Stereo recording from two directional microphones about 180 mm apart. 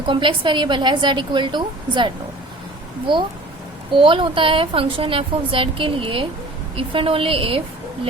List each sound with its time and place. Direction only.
0.1 s a woman's voice: 25° right (ahead or behind)
3.9 s a woman's voice: 25° right (ahead or behind)